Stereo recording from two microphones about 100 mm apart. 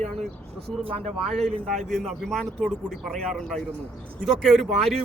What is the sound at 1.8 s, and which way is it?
Speech, centre (ahead or behind).